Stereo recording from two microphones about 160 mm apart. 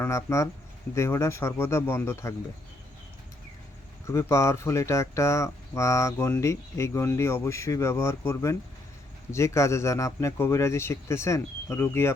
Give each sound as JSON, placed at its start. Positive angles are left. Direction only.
{"t": 0.0, "sound": "speech", "side_deg": 15}
{"t": 4.0, "sound": "speech", "side_deg": 15}